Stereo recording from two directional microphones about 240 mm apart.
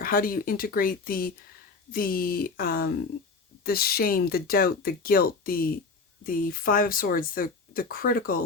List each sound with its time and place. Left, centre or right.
0.0 s speech: left